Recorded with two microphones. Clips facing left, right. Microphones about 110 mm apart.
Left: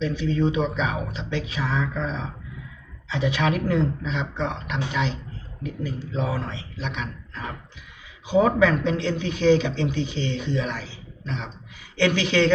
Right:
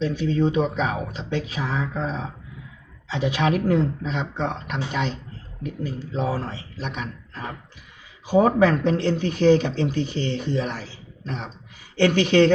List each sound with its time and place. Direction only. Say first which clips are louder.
0.0 s speech: right 1 dB; 40° right (ahead or behind)